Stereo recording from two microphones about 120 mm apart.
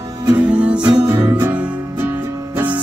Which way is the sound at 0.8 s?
30° right (ahead or behind).